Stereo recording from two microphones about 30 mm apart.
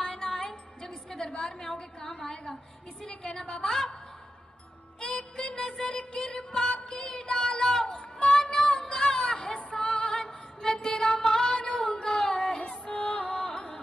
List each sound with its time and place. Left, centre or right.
0.0 s music: left
1.3 s a woman's voice: left
3.0 s music: left
3.6 s a woman's voice: left
5.0 s music: left
7.2 s a sound: left
7.6 s child singing: left
8.8 s a sound: left
9.7 s music: left
10.2 s music: centre; by 11.8 s left
11.9 s a sound: left
12.6 s music: left
13.5 s music: left